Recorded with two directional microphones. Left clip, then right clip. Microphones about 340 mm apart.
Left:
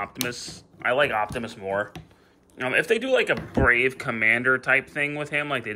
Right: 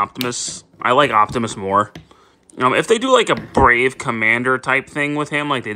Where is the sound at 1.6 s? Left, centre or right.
Right.